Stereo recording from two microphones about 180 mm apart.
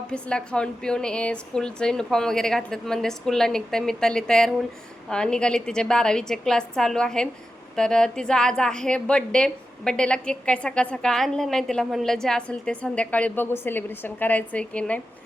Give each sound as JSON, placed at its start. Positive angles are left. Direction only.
{"t": 0.1, "sound": "a woman's voice", "side_deg": 5}